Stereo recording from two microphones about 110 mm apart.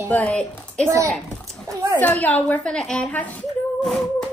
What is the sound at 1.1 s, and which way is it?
Children playing, 5° left (ahead or behind).